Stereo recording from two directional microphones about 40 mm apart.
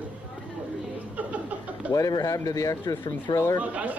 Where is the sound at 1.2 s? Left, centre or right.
Right.